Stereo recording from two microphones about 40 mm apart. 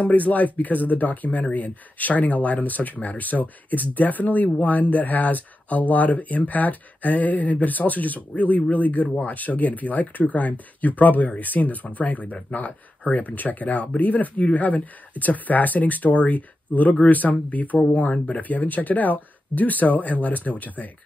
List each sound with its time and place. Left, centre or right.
0.0 s speech: left
17.9 s speech: left
18.4 s speech: left